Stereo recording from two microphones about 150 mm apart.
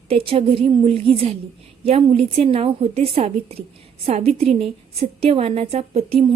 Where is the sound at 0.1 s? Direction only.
40° right (ahead or behind).